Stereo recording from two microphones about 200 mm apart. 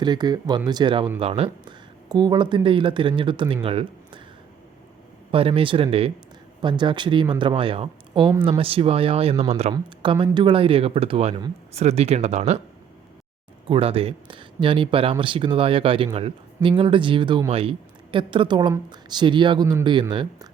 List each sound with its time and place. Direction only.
0.0 s speech: 20° right (ahead or behind)
5.3 s speech: 30° right (ahead or behind)
9.3 s speech: 15° right (ahead or behind); by 12.5 s 35° right (ahead or behind)
13.7 s speech: 30° right (ahead or behind)